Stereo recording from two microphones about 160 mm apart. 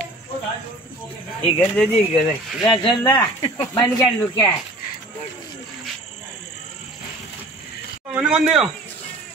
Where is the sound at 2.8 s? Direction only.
25° left (ahead or behind).